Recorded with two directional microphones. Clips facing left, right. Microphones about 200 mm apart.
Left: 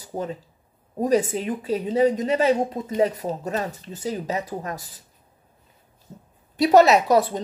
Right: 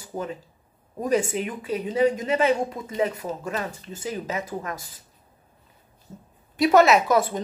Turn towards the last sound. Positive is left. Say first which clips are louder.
# left 2 dB
turn(degrees=35)  # may be behind; listen again after turning